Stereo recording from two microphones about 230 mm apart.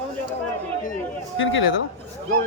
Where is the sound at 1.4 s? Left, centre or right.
Left.